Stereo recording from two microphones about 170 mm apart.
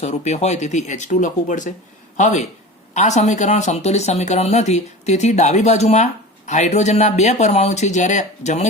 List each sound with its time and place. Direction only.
0.0 s speech: 40° left (ahead or behind)